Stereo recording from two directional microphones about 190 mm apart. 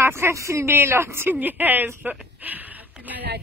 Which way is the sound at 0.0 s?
15° right (ahead or behind).